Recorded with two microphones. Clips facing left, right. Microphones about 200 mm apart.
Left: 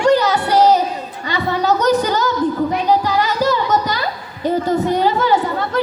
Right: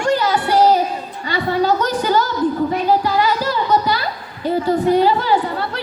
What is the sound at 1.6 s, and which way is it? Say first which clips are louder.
Music: left 5 dB; 40° left (ahead or behind).